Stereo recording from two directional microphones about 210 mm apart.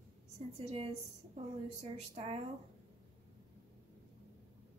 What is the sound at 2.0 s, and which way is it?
Speech, 30° right (ahead or behind).